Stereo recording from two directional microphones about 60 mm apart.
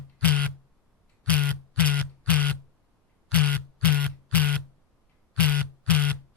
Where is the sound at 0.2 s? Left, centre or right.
Left.